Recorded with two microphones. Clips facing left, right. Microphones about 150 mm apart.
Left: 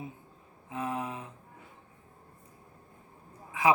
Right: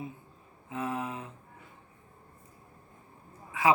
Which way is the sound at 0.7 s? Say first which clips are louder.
Even; 15° left (ahead or behind).